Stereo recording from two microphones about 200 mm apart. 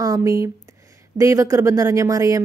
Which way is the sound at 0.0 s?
15° right (ahead or behind).